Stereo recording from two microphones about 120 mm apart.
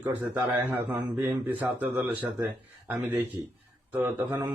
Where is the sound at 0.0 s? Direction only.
20° right (ahead or behind).